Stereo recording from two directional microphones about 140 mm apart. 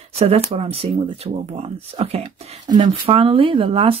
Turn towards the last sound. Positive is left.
turn(degrees=-45)  # may be behind; listen again after turning